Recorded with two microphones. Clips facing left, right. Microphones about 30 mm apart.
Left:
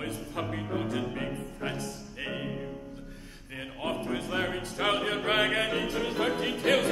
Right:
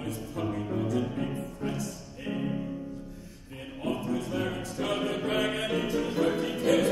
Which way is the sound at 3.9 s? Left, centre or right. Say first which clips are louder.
Right 1 dB; left.